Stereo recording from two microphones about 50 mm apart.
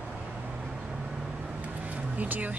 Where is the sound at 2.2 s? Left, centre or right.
Right.